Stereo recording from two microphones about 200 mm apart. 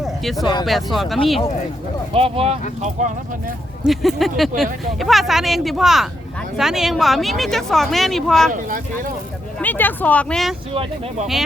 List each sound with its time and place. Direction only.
0.0 s a sound: centre (ahead or behind)
0.6 s speech: centre (ahead or behind)
2.1 s speech: 30° right (ahead or behind)
3.8 s speech: centre (ahead or behind)
8.5 s speech: 40° right (ahead or behind)
9.6 s speech: 10° left (ahead or behind)
10.8 s speech: 30° right (ahead or behind)